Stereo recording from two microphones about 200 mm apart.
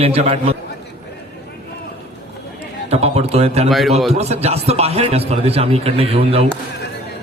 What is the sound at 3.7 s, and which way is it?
Speech, centre (ahead or behind).